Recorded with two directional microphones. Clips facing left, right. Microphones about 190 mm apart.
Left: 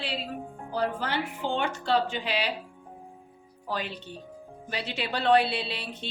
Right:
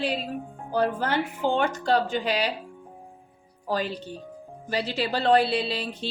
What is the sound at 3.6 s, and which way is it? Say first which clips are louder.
Speech: right 6 dB; 40° right (ahead or behind).